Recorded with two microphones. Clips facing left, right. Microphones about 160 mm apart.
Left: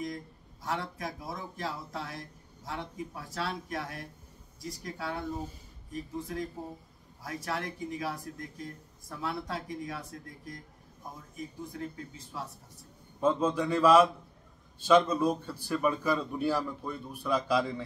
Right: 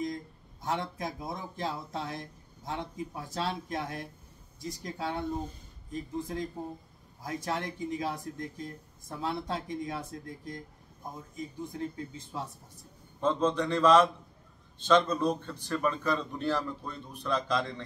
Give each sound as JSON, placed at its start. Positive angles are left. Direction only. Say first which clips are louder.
{"t": 0.7, "sound": "speech", "louder": "right 2 dB", "side_deg": -25}
{"t": 13.2, "sound": "a man's voice", "louder": "even", "side_deg": 10}